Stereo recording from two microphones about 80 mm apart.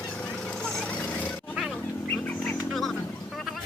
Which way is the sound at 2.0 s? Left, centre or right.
Left.